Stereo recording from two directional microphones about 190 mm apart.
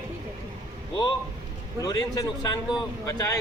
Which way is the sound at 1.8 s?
20° left (ahead or behind).